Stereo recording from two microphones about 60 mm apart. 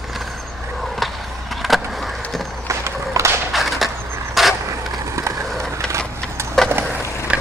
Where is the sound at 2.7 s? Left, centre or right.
Right.